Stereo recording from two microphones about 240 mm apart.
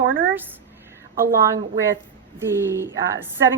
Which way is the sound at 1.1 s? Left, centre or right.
Right.